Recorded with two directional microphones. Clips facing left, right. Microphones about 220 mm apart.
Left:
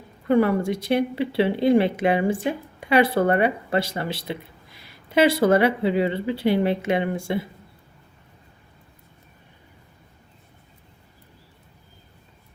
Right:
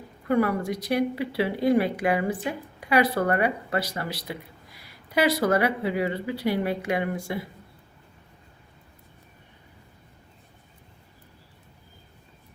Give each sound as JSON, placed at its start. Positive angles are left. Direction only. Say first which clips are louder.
{"t": 0.3, "sound": "speech", "louder": "left 4 dB", "side_deg": 25}